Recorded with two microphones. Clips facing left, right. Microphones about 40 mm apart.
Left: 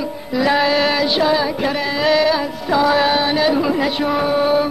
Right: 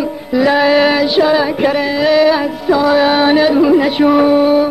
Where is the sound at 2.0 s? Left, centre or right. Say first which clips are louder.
Right 4 dB; centre.